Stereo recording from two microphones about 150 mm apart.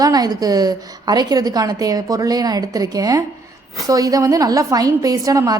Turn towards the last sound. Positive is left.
turn(degrees=-25)  # may be behind; listen again after turning